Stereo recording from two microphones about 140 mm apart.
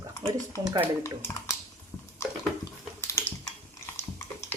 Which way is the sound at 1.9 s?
10° left (ahead or behind).